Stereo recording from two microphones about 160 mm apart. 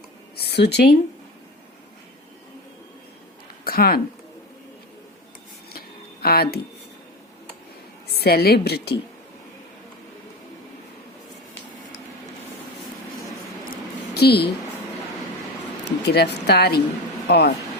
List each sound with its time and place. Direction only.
0.3 s speech: 90° left
3.6 s a sound: 70° left (ahead or behind)
6.2 s speech: 70° left (ahead or behind)
8.1 s a woman's voice: 80° left
14.1 s a woman's voice: 90° left
15.8 s speech: 90° left